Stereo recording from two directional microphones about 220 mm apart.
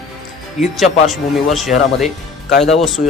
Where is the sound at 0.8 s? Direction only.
Centre (ahead or behind).